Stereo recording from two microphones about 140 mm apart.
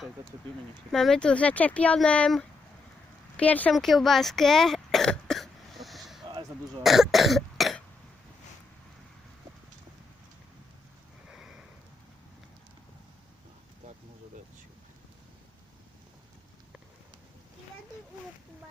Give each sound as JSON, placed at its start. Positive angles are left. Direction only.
{"t": 0.9, "sound": "speech", "side_deg": 0}
{"t": 3.8, "sound": "cough", "side_deg": 0}
{"t": 11.3, "sound": "sniff", "side_deg": -5}